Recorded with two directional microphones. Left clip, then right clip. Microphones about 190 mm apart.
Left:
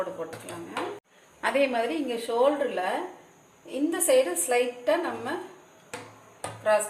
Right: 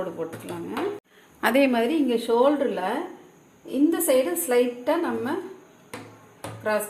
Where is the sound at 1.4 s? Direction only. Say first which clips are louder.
Right 4 dB; 55° right (ahead or behind).